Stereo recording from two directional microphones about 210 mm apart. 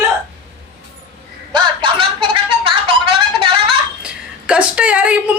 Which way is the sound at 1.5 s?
20° right (ahead or behind).